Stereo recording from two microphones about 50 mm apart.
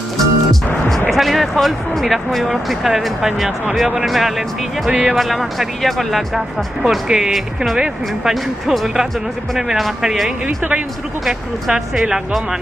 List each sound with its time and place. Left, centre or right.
0.2 s music: centre
1.1 s speech: centre
6.3 s speech: centre
10.4 s speech: right
11.9 s speech: centre